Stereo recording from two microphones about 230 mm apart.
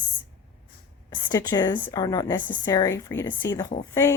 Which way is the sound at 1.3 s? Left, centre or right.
Centre.